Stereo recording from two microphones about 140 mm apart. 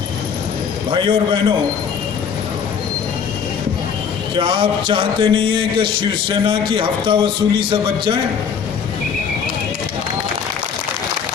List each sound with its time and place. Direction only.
0.9 s a man's voice: 35° right (ahead or behind)
4.4 s a man's voice: 35° right (ahead or behind)